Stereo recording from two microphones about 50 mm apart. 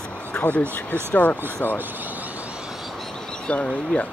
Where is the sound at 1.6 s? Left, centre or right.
Left.